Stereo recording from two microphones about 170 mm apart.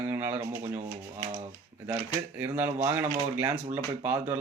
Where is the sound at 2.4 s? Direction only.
10° right (ahead or behind).